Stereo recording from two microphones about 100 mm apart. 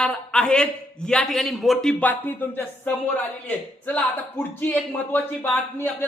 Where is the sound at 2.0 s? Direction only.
20° left (ahead or behind).